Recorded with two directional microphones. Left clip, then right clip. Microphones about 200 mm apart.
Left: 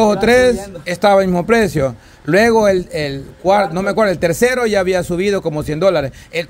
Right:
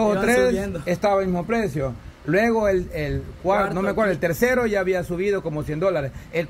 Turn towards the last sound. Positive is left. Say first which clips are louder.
# left 6 dB
turn(degrees=35)  # may be behind; listen again after turning